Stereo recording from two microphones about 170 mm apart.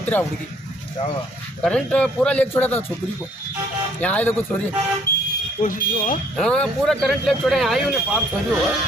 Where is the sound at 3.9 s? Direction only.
10° left (ahead or behind).